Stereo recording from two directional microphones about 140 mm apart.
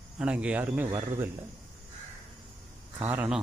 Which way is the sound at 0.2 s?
10° right (ahead or behind).